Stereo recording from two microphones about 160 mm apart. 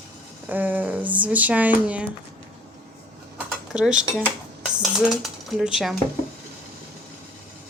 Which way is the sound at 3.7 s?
5° right (ahead or behind).